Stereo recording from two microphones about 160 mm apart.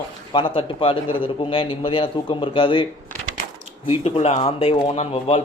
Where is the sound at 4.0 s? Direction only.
40° left (ahead or behind).